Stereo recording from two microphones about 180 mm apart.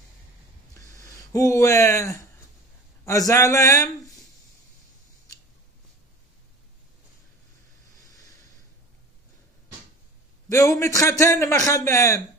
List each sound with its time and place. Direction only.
0.7 s a sound: 20° left (ahead or behind)
3.1 s speech: 20° left (ahead or behind)
10.5 s speech: 20° left (ahead or behind)